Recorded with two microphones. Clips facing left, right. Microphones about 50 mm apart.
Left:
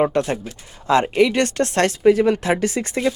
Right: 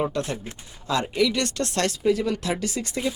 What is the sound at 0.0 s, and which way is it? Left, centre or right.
Speech, left.